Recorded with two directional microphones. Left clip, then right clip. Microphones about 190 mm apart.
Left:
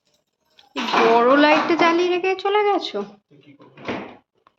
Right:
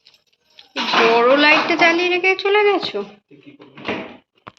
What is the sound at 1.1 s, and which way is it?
A woman's voice, 15° left (ahead or behind).